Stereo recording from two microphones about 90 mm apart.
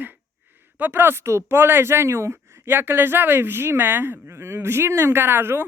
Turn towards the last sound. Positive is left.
turn(degrees=-25)  # may be behind; listen again after turning